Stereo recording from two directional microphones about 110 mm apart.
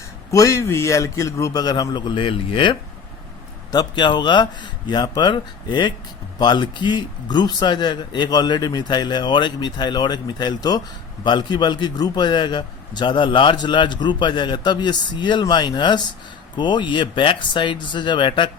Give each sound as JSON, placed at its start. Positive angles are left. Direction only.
{"t": 0.3, "sound": "a man's voice", "side_deg": 30}
{"t": 3.7, "sound": "a man's voice", "side_deg": 40}